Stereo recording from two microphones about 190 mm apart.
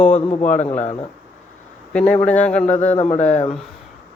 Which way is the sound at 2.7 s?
35° left (ahead or behind).